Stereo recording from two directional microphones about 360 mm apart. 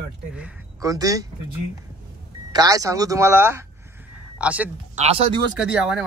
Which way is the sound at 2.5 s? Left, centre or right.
Centre.